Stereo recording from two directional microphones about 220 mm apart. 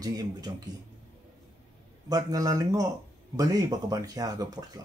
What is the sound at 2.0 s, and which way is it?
Speech, 15° right (ahead or behind).